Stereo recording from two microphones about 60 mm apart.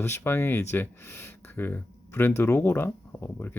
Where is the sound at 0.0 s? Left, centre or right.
Left.